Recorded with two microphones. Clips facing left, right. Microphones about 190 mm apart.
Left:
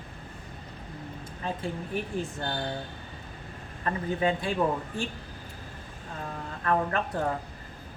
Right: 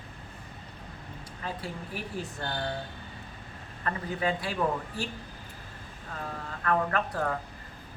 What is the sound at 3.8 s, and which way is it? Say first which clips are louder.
Speech: left 3 dB; 25° left (ahead or behind).